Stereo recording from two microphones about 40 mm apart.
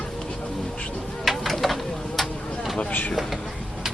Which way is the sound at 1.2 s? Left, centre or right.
Centre.